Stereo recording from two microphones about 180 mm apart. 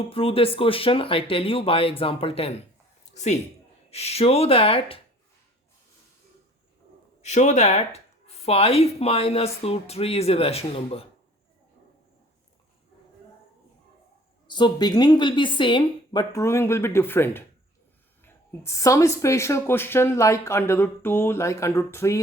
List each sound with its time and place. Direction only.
0.1 s speech: 30° left (ahead or behind)
3.8 s speech: 35° left (ahead or behind)
7.2 s speech: 40° left (ahead or behind)
14.4 s speech: 25° left (ahead or behind)